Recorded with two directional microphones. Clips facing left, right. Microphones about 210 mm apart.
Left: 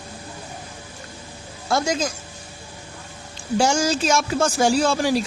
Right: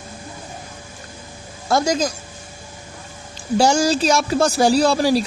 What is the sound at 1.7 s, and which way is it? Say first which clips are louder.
Speech: right 4 dB; 40° right (ahead or behind).